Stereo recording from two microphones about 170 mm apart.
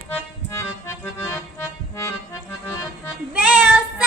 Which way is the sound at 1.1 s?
15° left (ahead or behind).